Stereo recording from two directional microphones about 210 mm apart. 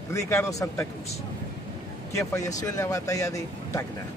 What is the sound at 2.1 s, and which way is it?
Speech, 15° left (ahead or behind).